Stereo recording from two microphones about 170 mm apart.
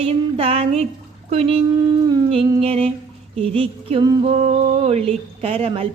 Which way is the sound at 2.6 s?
35° right (ahead or behind).